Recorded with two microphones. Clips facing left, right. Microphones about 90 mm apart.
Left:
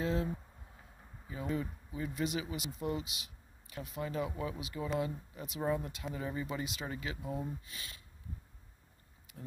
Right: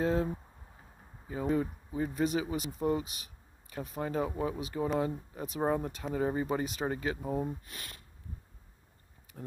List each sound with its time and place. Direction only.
0.0 s a sound: 40° right (ahead or behind)
1.2 s speech: 40° right (ahead or behind)
7.6 s speech: 55° right (ahead or behind)